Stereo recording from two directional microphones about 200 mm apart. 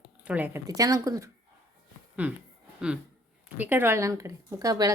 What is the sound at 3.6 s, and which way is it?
A woman's voice, 10° right (ahead or behind).